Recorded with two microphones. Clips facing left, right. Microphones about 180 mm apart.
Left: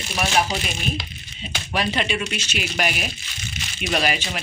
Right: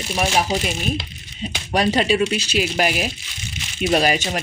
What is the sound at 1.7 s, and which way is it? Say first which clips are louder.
Speech: right 6 dB; 40° right (ahead or behind).